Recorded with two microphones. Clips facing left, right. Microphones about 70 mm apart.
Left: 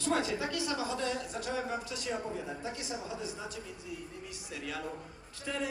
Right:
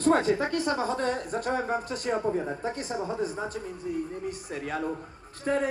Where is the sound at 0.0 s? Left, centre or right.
Right.